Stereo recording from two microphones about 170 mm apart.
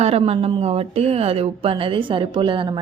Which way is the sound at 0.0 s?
35° right (ahead or behind).